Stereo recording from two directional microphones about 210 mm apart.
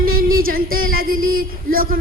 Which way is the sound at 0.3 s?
45° right (ahead or behind).